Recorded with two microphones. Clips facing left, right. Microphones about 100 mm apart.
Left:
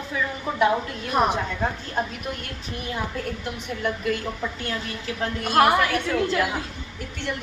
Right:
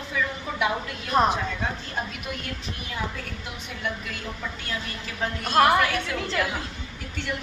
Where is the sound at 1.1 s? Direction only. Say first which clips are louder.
Right 1 dB; 10° left (ahead or behind).